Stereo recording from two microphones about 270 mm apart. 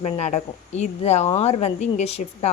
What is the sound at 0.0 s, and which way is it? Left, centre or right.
A woman's voice, left.